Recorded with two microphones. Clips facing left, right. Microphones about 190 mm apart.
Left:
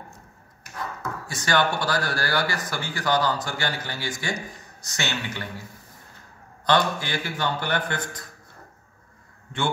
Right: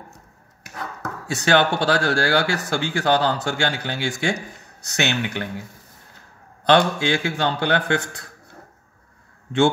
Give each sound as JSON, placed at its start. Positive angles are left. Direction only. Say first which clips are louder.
{"t": 1.4, "sound": "speech", "louder": "right 5 dB", "side_deg": -75}
{"t": 6.6, "sound": "speech", "louder": "right 5 dB", "side_deg": -75}